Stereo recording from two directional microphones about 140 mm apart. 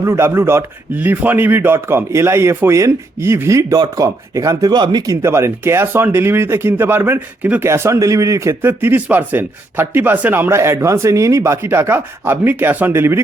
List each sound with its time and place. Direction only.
0.0 s speech: 20° right (ahead or behind)